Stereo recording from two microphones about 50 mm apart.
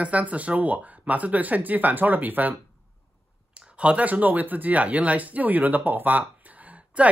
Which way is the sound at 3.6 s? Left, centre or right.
Right.